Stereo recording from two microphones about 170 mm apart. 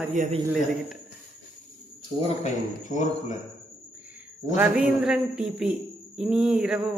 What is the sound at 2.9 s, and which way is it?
Speech, 45° left (ahead or behind).